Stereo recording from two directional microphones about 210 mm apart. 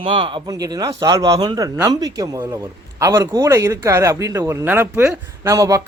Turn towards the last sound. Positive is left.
turn(degrees=-15)  # may be behind; listen again after turning